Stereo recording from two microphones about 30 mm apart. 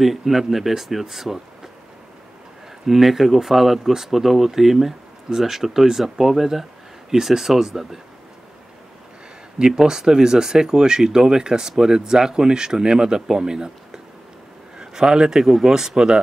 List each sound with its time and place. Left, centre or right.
0.0 s speech: centre
2.9 s speech: centre
9.6 s speech: right